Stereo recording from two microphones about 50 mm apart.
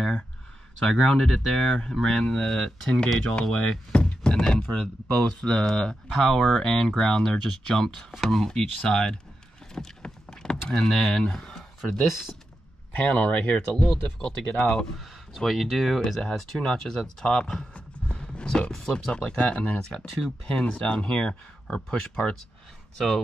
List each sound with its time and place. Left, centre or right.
0.8 s speech: centre
9.8 s power windows: centre
12.1 s speech: centre
12.9 s speech: left
15.3 s speech: centre